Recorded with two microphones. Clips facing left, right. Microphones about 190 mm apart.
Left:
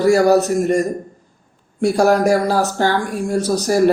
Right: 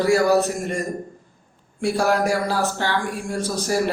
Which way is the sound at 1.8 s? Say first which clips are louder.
Left 6 dB; 40° left (ahead or behind).